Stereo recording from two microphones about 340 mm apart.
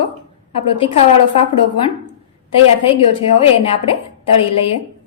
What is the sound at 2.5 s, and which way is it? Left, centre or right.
A woman's voice, centre.